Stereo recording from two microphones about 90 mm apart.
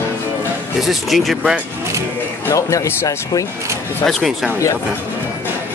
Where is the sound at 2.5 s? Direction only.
35° left (ahead or behind).